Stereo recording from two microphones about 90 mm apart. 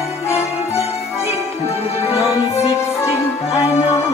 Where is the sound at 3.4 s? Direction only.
90° left.